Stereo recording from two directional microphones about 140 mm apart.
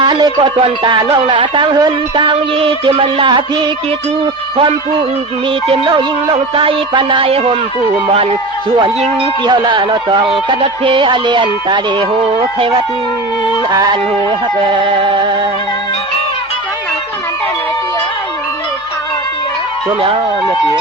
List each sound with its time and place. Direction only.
0.0 s speech: 35° right (ahead or behind)
8.8 s speech: 45° right (ahead or behind)
9.4 s speech: 35° right (ahead or behind)
14.7 s speech: 35° right (ahead or behind)